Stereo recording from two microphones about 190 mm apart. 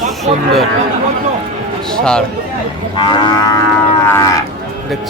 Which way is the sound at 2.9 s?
20° left (ahead or behind).